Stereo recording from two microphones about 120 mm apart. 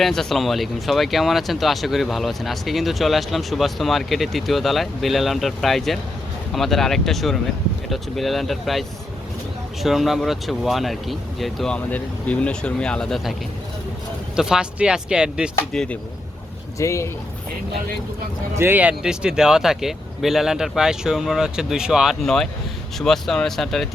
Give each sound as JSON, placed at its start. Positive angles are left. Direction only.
{"t": 0.0, "sound": "speech", "side_deg": 5}
{"t": 9.8, "sound": "speech", "side_deg": 0}
{"t": 14.3, "sound": "speech", "side_deg": -5}
{"t": 15.7, "sound": "speech", "side_deg": 5}
{"t": 16.7, "sound": "speech", "side_deg": 25}
{"t": 18.5, "sound": "speech", "side_deg": -15}